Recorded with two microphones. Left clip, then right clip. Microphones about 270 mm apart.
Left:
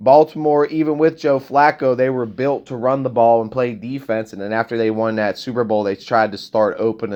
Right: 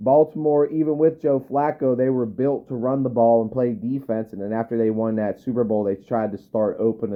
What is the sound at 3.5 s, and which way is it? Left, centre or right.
Speech, centre.